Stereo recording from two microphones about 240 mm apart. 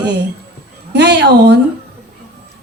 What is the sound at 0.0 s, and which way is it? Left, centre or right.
A woman's voice, right.